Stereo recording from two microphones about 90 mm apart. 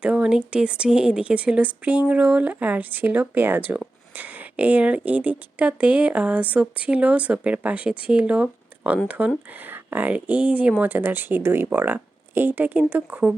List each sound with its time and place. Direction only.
0.0 s speech: 10° right (ahead or behind)